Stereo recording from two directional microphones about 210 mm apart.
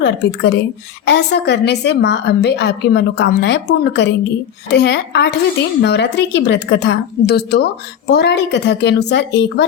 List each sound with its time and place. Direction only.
0.0 s a woman's voice: 55° left (ahead or behind)